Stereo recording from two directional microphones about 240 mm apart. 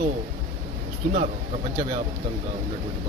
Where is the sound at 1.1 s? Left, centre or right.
Right.